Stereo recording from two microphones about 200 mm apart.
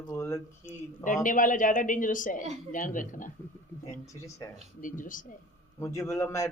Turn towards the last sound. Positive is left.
turn(degrees=15)  # may be behind; listen again after turning